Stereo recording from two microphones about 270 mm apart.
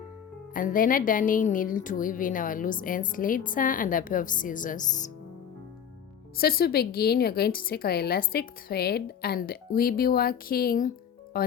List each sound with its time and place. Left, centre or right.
0.5 s speech: left
6.3 s a woman's voice: left